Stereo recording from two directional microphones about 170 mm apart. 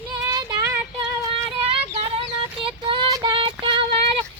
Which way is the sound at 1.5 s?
30° right (ahead or behind).